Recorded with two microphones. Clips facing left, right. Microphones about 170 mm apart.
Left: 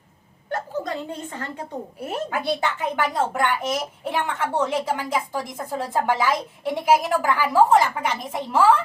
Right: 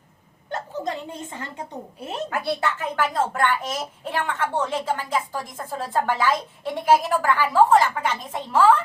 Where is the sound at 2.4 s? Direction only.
15° left (ahead or behind).